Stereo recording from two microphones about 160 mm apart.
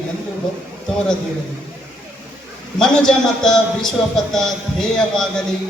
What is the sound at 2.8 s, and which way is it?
A man's voice, 5° left (ahead or behind).